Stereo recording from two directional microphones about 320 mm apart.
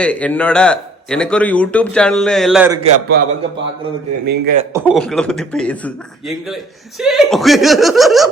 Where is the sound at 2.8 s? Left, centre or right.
Right.